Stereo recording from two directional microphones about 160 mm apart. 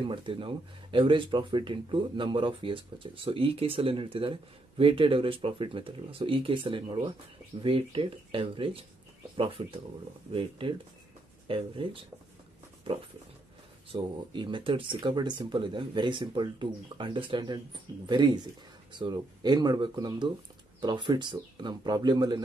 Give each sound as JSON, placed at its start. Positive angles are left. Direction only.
{"t": 0.0, "sound": "speech", "side_deg": -30}
{"t": 13.9, "sound": "speech", "side_deg": -30}